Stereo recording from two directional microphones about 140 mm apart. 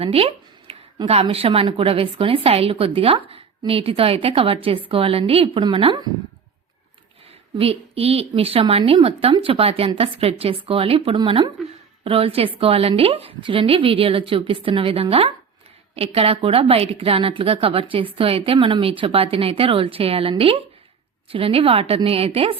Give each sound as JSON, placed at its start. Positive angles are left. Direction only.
{"t": 0.0, "sound": "speech", "side_deg": -45}
{"t": 7.6, "sound": "a woman's voice", "side_deg": -45}